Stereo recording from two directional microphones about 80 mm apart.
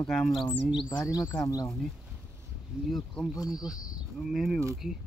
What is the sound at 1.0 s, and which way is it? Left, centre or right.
Speech, left.